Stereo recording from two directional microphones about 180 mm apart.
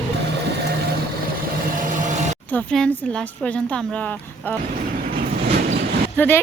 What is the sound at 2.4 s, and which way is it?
A woman's voice, 5° left (ahead or behind).